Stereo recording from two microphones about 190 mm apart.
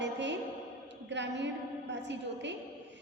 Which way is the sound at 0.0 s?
70° right (ahead or behind).